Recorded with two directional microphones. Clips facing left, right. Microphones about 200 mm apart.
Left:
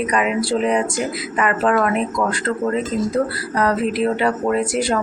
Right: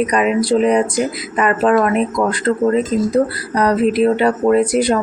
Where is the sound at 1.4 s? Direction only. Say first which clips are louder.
Right 4 dB; 30° right (ahead or behind).